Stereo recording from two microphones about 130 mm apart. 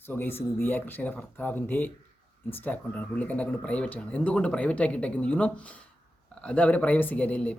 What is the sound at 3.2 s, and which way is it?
Speech, 10° left (ahead or behind).